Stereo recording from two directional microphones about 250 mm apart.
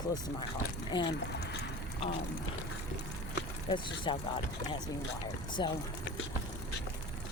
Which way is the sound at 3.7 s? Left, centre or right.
Centre.